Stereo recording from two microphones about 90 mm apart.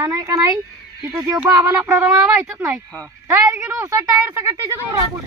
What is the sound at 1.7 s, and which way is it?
Speech, 20° right (ahead or behind).